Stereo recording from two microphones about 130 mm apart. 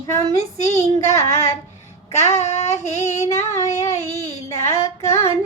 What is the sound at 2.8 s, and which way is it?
Female singing, 60° left (ahead or behind).